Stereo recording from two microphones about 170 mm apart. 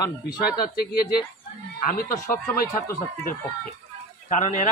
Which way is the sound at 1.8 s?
50° left (ahead or behind).